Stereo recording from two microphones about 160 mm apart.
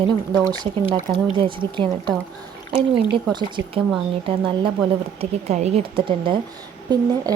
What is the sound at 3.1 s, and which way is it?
A woman's voice, 30° right (ahead or behind).